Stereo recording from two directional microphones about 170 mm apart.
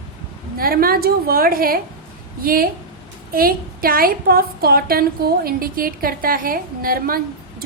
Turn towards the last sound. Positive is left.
turn(degrees=-60)  # may be behind; listen again after turning